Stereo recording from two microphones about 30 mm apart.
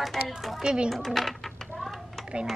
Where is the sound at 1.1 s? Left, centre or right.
Centre.